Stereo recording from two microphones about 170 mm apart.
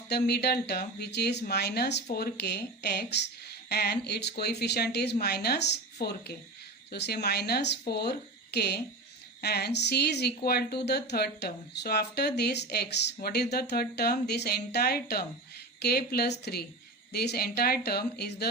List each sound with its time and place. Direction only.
0.1 s speech: 70° left (ahead or behind)